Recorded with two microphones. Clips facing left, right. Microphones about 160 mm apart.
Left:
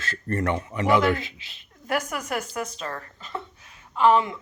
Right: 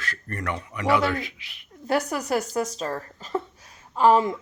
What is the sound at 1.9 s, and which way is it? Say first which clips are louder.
Speech: right 4 dB; 35° right (ahead or behind).